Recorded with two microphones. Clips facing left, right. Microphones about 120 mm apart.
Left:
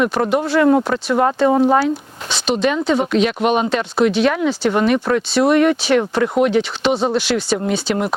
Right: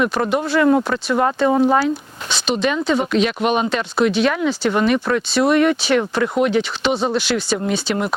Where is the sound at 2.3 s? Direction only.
60° left (ahead or behind); by 6.3 s 40° left (ahead or behind).